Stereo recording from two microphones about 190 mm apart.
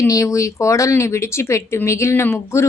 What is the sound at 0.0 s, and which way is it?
Speech, 15° left (ahead or behind).